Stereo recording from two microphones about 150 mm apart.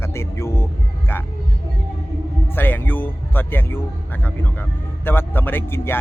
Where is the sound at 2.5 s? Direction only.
15° left (ahead or behind).